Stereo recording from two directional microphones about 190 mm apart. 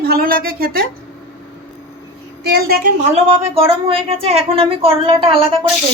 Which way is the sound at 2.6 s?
55° right (ahead or behind).